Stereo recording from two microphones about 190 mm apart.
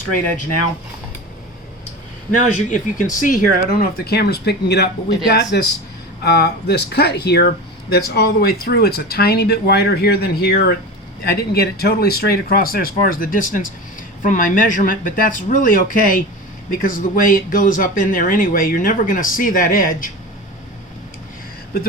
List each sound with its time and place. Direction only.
2.4 s speech: 40° left (ahead or behind)